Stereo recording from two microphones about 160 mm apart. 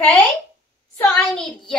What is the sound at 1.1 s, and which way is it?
Speech, centre (ahead or behind).